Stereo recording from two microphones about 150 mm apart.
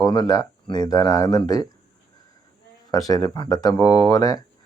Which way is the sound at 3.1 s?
25° left (ahead or behind).